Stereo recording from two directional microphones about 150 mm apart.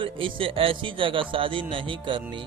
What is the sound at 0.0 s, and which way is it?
Music, 35° right (ahead or behind).